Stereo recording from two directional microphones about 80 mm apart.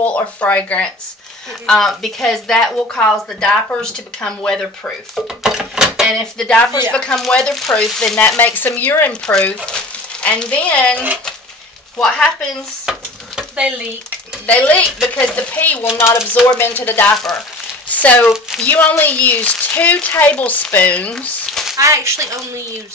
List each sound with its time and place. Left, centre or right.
0.0 s speech: centre
1.7 s speech: centre
5.4 s a sound: centre
6.3 s speech: centre
8.4 s a woman's voice: left
9.2 s speech: centre
12.0 s speech: centre
12.9 s stir: centre
13.4 s a sound: centre
14.4 s a woman's voice: centre
16.0 s speech: left
16.5 s a woman's voice: left
21.5 s a sound: centre
21.7 s speech: right